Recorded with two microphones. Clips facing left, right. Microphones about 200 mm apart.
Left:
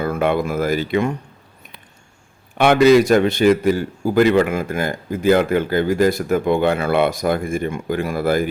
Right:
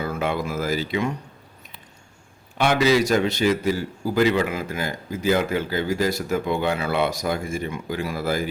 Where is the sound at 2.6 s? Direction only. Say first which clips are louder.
Left 7 dB; 55° left (ahead or behind).